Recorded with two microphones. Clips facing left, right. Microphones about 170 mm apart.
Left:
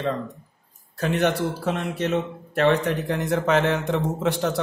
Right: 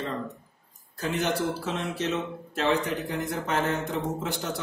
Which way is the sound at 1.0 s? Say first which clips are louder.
Left 5 dB; 65° left (ahead or behind).